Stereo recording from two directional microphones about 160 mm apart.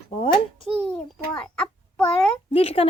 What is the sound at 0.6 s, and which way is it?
Speech, 5° left (ahead or behind).